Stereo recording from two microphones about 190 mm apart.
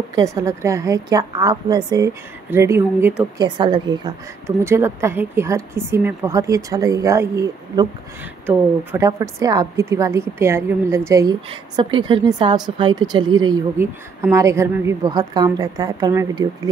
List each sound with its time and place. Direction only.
0.1 s a woman's voice: 15° right (ahead or behind)
3.3 s a woman's voice: 25° right (ahead or behind)
4.5 s a woman's voice: 15° right (ahead or behind)